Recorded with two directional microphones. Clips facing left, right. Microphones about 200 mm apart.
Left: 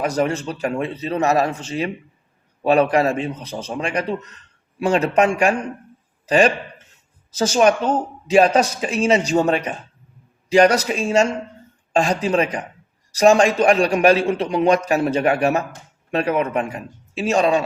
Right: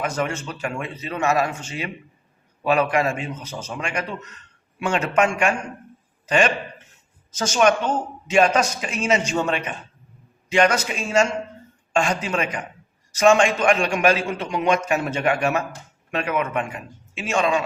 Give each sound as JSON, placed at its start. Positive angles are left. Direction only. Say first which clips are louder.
{"t": 0.0, "sound": "a man's voice", "louder": "left 5 dB", "side_deg": 35}